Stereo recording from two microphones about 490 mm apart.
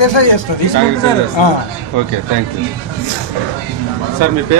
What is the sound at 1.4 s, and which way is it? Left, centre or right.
Speech, left.